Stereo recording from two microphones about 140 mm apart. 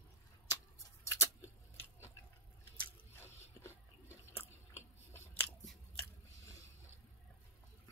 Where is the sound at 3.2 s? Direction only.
20° left (ahead or behind).